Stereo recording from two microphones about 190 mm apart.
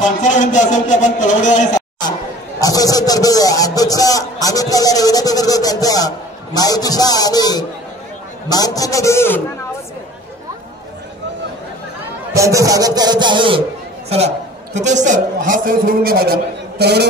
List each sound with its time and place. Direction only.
0.0 s a man's voice: 40° left (ahead or behind)
2.6 s a man's voice: 20° left (ahead or behind)
12.4 s a man's voice: 15° right (ahead or behind); by 17.1 s 60° right (ahead or behind)